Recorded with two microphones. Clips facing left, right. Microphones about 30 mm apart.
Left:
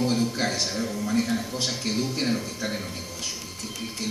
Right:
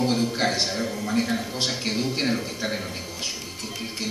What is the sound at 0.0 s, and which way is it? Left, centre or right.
Speech, right.